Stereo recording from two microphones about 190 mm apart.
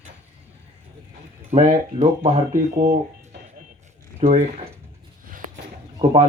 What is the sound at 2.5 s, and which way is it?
Speech, 45° right (ahead or behind).